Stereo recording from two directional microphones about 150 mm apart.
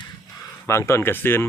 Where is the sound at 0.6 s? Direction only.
20° left (ahead or behind).